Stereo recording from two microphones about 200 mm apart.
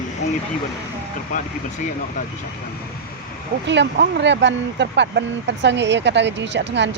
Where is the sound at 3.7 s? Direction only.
60° right (ahead or behind).